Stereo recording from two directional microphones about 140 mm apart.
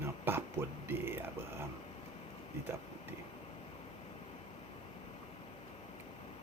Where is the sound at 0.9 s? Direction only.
15° right (ahead or behind).